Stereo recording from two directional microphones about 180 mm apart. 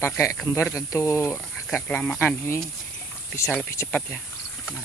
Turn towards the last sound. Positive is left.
turn(degrees=10)  # may be behind; listen again after turning